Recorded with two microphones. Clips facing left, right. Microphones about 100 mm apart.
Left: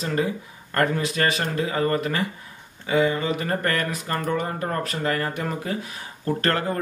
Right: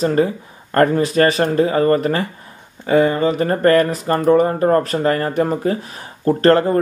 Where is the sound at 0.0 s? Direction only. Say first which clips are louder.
Right 8 dB; 40° right (ahead or behind).